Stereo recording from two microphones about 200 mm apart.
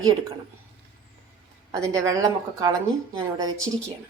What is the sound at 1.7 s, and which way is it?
Speech, 15° right (ahead or behind).